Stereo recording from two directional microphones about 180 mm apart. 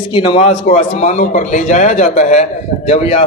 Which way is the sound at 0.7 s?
40° left (ahead or behind).